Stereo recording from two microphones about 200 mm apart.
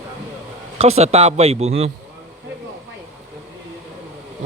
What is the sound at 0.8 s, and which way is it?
Speech, 30° right (ahead or behind).